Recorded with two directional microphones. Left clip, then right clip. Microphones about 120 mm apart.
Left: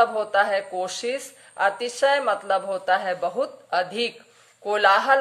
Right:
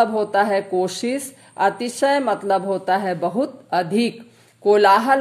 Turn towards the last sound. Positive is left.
turn(degrees=-30)  # may be behind; listen again after turning